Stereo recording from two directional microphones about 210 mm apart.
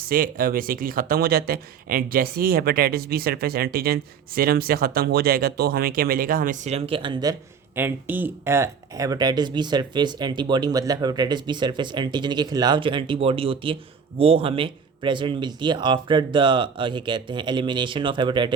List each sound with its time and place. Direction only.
0.1 s speech: 40° right (ahead or behind); by 7.3 s 20° right (ahead or behind)
7.8 s speech: 10° right (ahead or behind)